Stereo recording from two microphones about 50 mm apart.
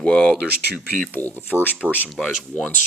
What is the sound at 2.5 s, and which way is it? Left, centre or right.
Speech, left.